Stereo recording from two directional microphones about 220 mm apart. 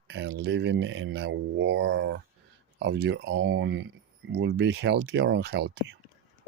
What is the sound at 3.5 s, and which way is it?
Speech, 60° right (ahead or behind).